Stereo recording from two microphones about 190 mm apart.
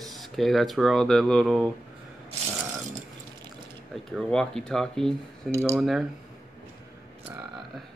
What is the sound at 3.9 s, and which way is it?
Speech, centre (ahead or behind).